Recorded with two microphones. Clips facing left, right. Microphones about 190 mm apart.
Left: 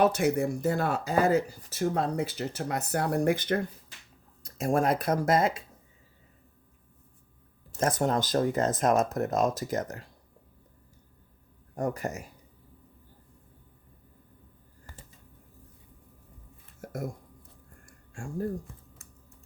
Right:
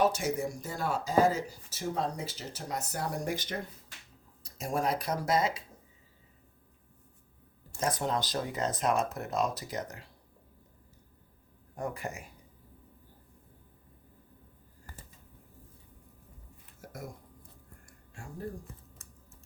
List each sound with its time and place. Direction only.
0.0 s speech: 60° left (ahead or behind)
7.8 s speech: 50° left (ahead or behind)
11.8 s speech: 40° left (ahead or behind)
16.8 s a sound: 50° left (ahead or behind)
18.1 s speech: 50° left (ahead or behind)